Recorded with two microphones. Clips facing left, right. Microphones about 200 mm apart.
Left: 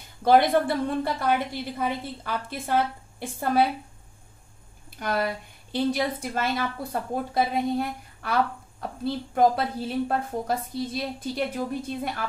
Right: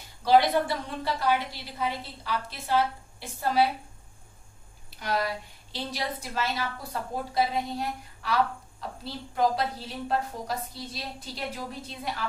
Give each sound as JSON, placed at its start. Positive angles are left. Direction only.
{"t": 0.2, "sound": "a woman's voice", "side_deg": 55}
{"t": 4.9, "sound": "a woman's voice", "side_deg": 50}